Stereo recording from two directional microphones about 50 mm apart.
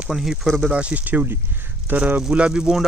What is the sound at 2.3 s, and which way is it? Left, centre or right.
Speech, right.